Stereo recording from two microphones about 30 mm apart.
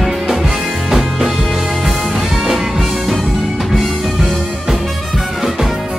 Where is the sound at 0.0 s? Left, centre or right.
Centre.